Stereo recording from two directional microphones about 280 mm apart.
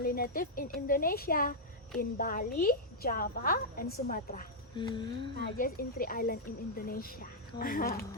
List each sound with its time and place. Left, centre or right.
0.0 s a woman's voice: left
4.8 s a sound: centre
5.5 s a woman's voice: left